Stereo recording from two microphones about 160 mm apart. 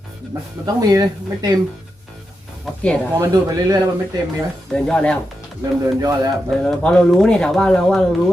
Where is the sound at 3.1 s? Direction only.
20° right (ahead or behind).